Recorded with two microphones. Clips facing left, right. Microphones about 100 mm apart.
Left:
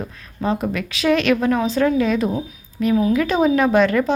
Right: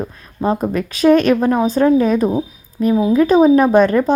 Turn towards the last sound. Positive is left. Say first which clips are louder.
# right 4 dB
turn(degrees=-40)  # may be behind; listen again after turning